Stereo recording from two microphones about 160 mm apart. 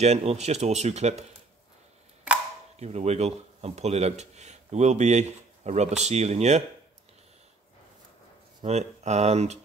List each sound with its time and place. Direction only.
0.0 s speech: 40° right (ahead or behind)
2.8 s speech: 40° right (ahead or behind)
8.6 s speech: 45° right (ahead or behind)